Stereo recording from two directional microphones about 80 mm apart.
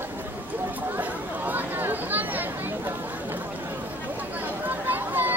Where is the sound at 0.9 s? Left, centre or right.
Right.